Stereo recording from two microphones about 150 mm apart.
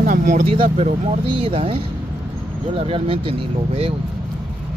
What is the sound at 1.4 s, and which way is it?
Speech, 40° right (ahead or behind).